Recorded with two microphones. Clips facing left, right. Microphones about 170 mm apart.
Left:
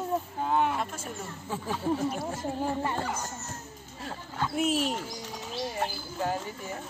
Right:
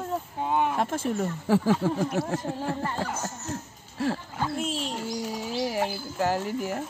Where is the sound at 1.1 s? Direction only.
85° right.